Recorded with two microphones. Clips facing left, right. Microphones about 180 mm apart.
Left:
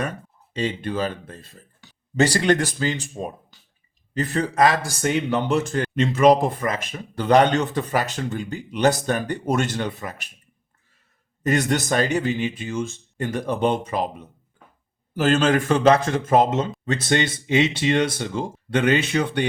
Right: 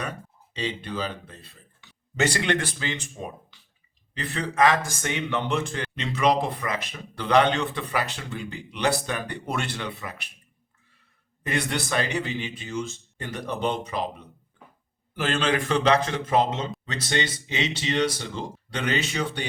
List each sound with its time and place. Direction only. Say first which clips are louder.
0.5 s a man's voice: left 5 dB; 50° left (ahead or behind)
11.4 s speech: left 7 dB; 40° left (ahead or behind)